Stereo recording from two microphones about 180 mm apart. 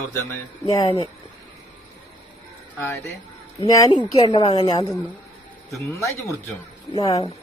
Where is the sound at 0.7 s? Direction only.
25° left (ahead or behind).